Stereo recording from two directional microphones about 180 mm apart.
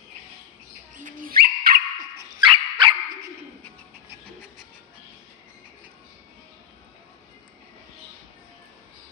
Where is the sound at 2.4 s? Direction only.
25° right (ahead or behind).